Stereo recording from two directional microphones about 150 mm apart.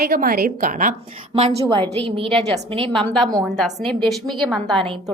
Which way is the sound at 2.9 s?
5° left (ahead or behind).